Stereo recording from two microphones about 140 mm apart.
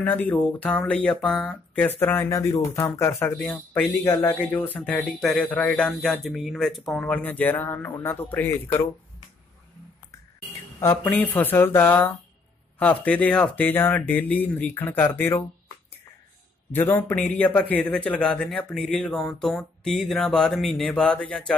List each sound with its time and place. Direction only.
0.0 s speech: 10° left (ahead or behind)
10.8 s speech: 15° left (ahead or behind)
16.7 s a man's voice: 15° left (ahead or behind)